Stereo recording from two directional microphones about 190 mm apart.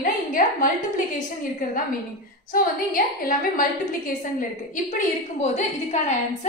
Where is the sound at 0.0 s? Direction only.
45° left (ahead or behind).